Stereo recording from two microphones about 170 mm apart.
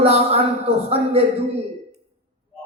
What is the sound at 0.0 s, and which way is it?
Speech, 35° right (ahead or behind).